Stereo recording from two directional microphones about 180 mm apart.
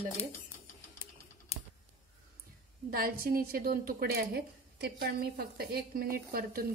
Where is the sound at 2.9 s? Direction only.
55° right (ahead or behind).